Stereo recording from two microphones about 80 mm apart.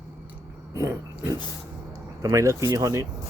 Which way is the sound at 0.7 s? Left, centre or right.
Right.